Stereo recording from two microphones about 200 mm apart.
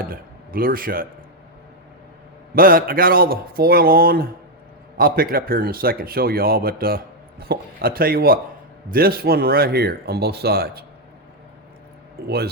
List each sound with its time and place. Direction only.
0.1 s speech: 45° right (ahead or behind)
2.6 s a man's voice: 45° right (ahead or behind)
12.2 s a man's voice: 50° right (ahead or behind)